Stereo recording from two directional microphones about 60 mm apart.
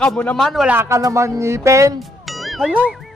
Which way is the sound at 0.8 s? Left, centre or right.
Right.